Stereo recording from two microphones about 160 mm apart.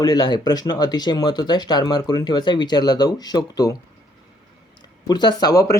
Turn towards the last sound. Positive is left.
turn(degrees=20)  # may be behind; listen again after turning